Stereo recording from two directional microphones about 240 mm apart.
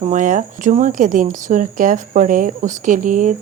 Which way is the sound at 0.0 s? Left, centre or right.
Right.